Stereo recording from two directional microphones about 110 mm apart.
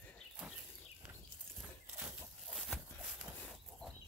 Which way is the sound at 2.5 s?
Centre (ahead or behind).